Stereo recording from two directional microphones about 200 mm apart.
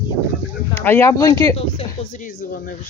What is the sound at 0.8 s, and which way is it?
Speech, 10° left (ahead or behind).